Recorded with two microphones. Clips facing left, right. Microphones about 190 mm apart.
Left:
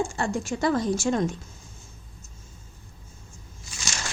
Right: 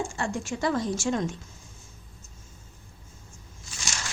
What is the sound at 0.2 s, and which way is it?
A woman's voice, 45° left (ahead or behind).